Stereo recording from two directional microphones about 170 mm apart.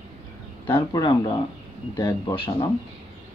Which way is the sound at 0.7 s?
25° left (ahead or behind).